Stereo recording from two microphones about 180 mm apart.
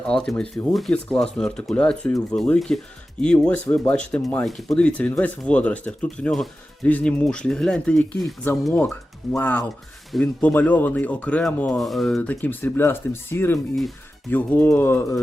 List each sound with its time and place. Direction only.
0.1 s speech: 5° left (ahead or behind)